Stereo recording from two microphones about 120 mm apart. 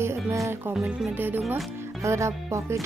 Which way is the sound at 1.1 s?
15° right (ahead or behind).